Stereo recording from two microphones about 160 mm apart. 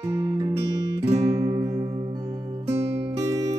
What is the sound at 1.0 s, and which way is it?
Music, 40° right (ahead or behind).